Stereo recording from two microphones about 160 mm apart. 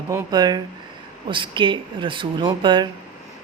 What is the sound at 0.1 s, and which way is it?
Speech, 20° right (ahead or behind).